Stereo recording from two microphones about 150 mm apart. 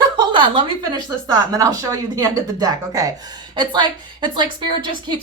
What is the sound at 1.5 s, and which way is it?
A woman's voice, 25° right (ahead or behind).